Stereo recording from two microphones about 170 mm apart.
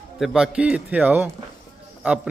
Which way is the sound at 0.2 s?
5° right (ahead or behind).